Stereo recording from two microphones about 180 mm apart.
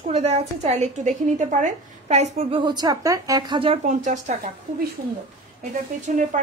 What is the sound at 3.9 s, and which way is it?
Speech, 45° right (ahead or behind).